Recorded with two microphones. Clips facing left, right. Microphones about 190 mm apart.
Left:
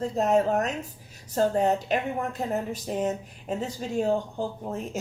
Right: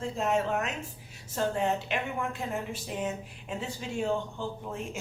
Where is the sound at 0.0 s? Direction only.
40° left (ahead or behind).